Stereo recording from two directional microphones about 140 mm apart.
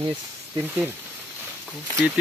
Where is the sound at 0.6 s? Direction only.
15° right (ahead or behind).